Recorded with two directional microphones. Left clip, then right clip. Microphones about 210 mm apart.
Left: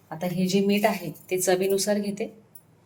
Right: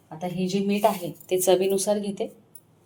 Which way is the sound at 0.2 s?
5° left (ahead or behind).